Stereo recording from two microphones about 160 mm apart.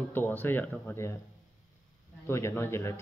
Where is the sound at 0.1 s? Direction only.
10° left (ahead or behind).